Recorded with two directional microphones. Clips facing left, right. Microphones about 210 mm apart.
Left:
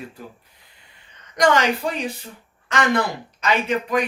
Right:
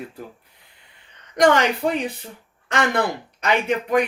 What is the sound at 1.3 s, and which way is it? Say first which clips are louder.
Speech: right 2 dB; 55° right (ahead or behind).